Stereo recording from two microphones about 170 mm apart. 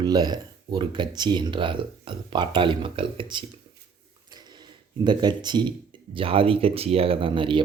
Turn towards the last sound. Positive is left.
turn(degrees=-30)  # may be behind; listen again after turning